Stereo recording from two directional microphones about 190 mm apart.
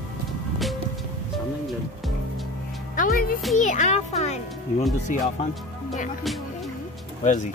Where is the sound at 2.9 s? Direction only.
45° left (ahead or behind).